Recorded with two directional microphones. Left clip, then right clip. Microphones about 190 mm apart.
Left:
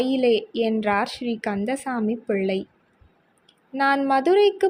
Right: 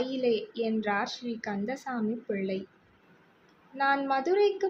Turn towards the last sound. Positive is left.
turn(degrees=40)  # may be behind; listen again after turning